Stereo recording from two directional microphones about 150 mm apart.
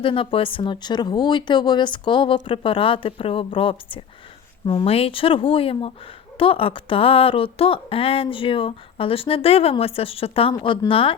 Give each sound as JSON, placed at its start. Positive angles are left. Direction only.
{"t": 0.0, "sound": "speech", "side_deg": 35}